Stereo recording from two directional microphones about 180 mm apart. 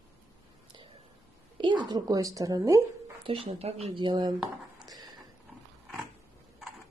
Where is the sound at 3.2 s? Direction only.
30° right (ahead or behind).